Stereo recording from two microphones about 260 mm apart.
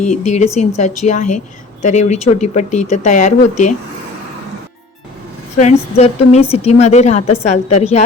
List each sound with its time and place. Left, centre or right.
0.0 s speech: left
5.5 s speech: left